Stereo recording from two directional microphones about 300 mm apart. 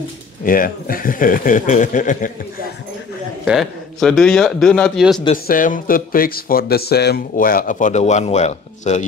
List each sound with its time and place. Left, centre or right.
0.5 s speech: left
3.4 s a man's voice: centre
5.2 s speech: left